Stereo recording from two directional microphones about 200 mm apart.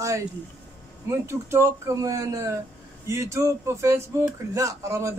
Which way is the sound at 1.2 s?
15° right (ahead or behind).